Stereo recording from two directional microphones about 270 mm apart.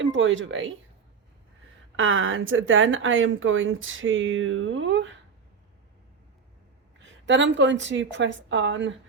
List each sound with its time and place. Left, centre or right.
0.0 s speech: right
2.0 s speech: right
7.3 s speech: right